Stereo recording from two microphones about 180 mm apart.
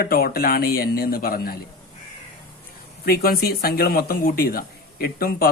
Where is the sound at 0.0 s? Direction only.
55° left (ahead or behind).